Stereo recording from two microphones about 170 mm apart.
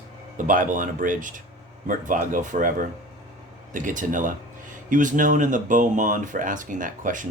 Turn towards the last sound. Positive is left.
turn(degrees=-50)  # may be behind; listen again after turning